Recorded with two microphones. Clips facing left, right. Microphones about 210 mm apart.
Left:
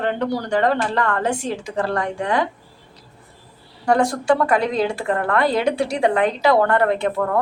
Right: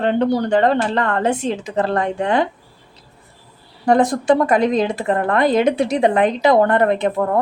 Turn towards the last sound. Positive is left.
turn(degrees=-20)  # may be behind; listen again after turning